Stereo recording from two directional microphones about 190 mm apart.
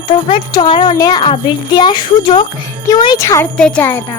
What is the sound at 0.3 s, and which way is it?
Speech, 25° left (ahead or behind).